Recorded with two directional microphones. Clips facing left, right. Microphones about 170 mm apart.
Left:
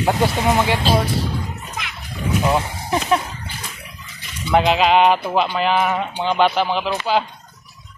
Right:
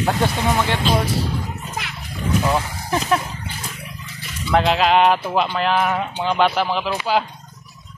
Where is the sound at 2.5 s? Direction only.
15° left (ahead or behind).